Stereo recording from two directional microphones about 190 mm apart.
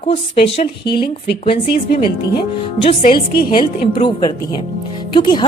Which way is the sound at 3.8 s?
25° left (ahead or behind).